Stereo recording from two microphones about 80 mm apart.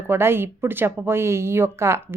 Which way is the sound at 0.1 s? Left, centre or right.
Right.